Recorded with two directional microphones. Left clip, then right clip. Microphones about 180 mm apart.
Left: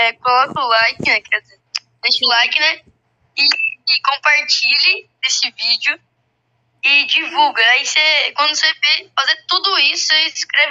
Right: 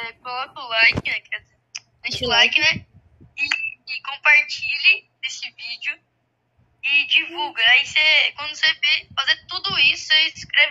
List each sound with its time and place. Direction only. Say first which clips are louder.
0.6 s a woman's voice: left 4 dB; 50° left (ahead or behind)